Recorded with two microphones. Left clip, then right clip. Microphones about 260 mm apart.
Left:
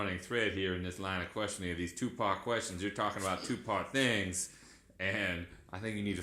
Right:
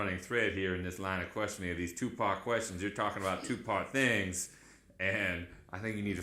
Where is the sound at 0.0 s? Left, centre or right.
Centre.